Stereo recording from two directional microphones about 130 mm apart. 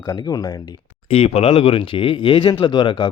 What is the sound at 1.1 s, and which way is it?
Speech, 50° left (ahead or behind).